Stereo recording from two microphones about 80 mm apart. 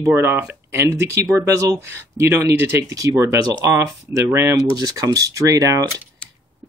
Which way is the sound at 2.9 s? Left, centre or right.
Right.